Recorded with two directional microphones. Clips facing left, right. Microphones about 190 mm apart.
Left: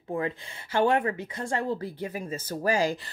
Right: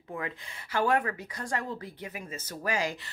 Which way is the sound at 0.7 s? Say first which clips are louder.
Left 4 dB; 25° left (ahead or behind).